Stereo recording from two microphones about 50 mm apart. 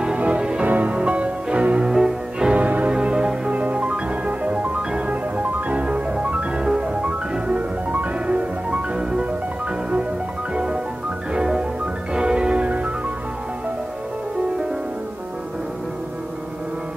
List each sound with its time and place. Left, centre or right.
0.0 s music: right
0.7 s music: right
1.9 s music: centre
2.5 s music: right
10.5 s music: centre